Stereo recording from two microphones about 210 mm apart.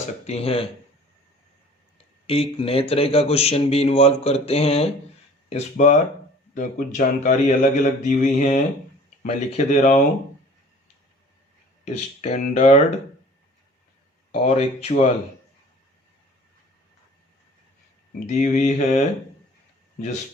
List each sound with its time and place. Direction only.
0.3 s a man's voice: 30° left (ahead or behind)
2.2 s a man's voice: 25° left (ahead or behind)
12.2 s speech: 30° left (ahead or behind)
14.3 s a man's voice: 30° left (ahead or behind)
18.3 s speech: 35° left (ahead or behind)